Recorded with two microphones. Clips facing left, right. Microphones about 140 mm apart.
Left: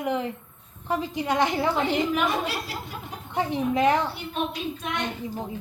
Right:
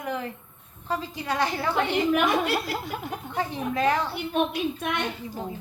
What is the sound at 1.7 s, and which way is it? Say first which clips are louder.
A woman's voice: right 1 dB; 60° right (ahead or behind).